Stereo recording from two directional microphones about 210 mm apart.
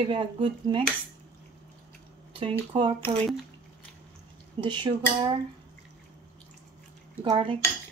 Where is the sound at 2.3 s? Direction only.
25° right (ahead or behind).